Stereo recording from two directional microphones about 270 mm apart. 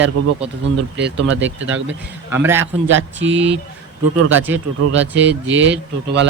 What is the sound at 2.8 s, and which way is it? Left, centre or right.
A man's voice, right.